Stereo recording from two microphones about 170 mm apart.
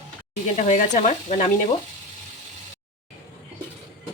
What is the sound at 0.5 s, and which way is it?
Speech, 45° left (ahead or behind).